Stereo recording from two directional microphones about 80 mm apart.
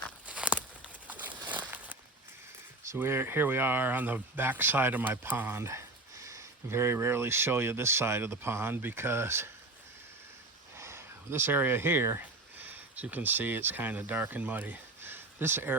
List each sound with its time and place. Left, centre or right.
0.3 s a sound: centre
2.9 s speech: right
10.8 s speech: right